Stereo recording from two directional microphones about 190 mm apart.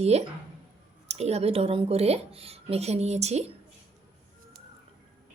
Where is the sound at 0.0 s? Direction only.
35° right (ahead or behind).